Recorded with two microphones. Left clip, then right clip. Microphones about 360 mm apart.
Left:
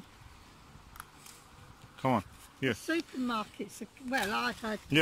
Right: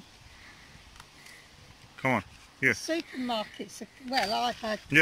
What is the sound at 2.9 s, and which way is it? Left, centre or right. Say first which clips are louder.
Speech: right 2 dB; centre.